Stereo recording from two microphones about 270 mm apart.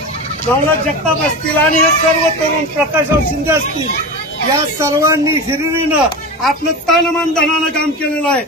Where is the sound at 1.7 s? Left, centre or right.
Left.